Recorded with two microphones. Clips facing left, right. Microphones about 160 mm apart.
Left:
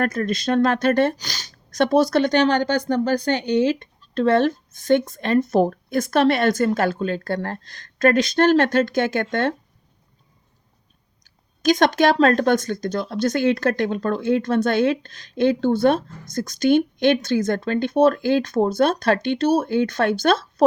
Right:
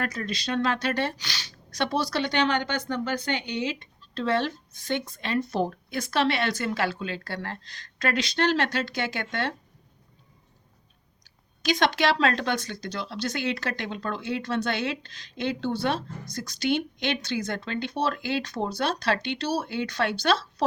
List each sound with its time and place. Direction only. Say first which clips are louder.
0.0 s a woman's voice: left 9 dB; 50° left (ahead or behind)
11.2 s a woman's voice: left 10 dB; 45° left (ahead or behind)